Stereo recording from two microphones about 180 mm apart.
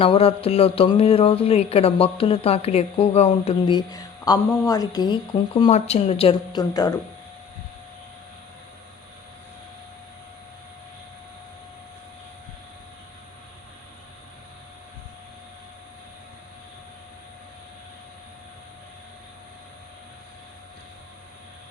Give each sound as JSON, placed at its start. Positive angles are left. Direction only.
{"t": 0.0, "sound": "speech", "side_deg": 35}
{"t": 3.8, "sound": "a woman's voice", "side_deg": 20}